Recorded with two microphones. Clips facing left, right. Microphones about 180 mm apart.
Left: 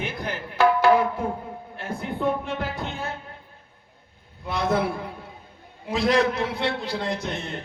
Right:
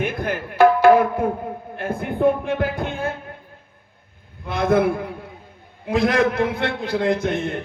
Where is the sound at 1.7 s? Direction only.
55° right (ahead or behind).